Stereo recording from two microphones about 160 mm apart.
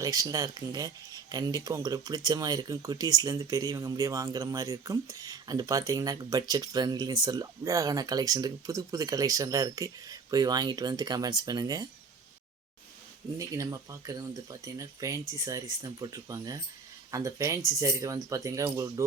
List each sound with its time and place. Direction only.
0.0 s speech: 20° right (ahead or behind)
13.4 s speech: 20° right (ahead or behind)